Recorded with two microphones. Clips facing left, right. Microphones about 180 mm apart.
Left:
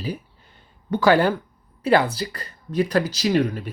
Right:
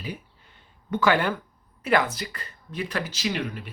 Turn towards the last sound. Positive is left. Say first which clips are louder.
# left 8 dB
turn(degrees=40)  # may be behind; listen again after turning